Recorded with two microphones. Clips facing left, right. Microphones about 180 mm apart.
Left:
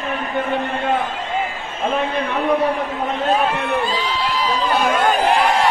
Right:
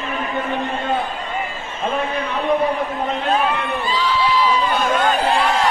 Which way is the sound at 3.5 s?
75° left (ahead or behind).